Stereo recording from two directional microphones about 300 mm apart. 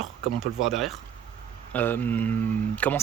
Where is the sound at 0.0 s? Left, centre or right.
Centre.